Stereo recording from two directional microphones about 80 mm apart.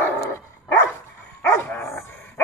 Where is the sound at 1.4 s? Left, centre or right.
Left.